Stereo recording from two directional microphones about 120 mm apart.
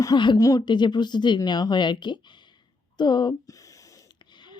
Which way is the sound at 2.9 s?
40° left (ahead or behind).